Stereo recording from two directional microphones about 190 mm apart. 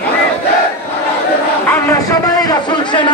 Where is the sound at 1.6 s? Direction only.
15° left (ahead or behind).